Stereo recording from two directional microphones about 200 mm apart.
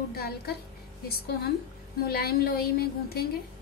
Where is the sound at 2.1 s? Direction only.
50° left (ahead or behind).